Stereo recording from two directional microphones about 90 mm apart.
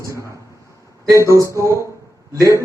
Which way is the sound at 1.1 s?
35° right (ahead or behind).